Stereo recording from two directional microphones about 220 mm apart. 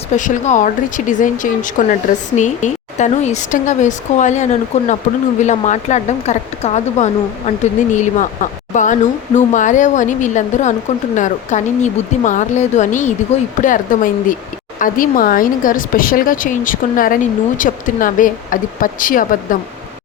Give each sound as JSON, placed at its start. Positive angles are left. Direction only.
{"t": 0.2, "sound": "speech", "side_deg": 35}